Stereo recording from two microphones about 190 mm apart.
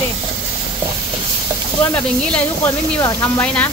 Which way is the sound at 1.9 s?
5° left (ahead or behind).